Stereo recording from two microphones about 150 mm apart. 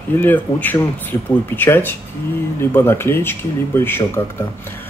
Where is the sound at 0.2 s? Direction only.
10° left (ahead or behind).